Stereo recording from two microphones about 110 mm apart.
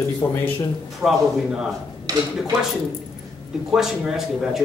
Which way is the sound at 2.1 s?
35° right (ahead or behind).